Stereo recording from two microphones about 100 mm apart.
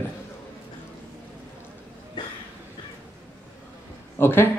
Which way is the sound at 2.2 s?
50° left (ahead or behind).